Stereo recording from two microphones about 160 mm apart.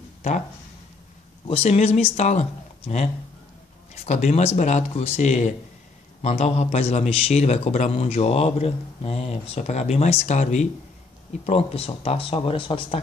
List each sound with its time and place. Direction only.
1.5 s a man's voice: 40° left (ahead or behind)